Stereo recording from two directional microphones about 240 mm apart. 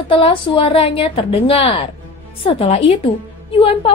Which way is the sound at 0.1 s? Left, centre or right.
Left.